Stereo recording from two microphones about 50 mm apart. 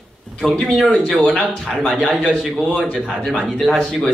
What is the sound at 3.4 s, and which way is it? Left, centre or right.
Speech, centre.